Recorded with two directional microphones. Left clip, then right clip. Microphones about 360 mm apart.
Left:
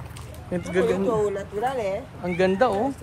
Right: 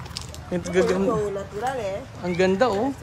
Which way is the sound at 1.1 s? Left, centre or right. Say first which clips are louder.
Left 2 dB; left.